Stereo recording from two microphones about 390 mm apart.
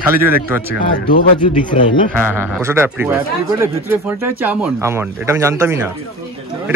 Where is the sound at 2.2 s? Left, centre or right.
Centre.